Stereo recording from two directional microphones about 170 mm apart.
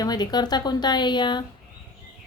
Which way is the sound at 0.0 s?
25° left (ahead or behind).